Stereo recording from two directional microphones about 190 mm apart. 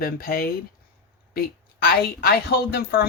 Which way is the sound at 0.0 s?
50° left (ahead or behind).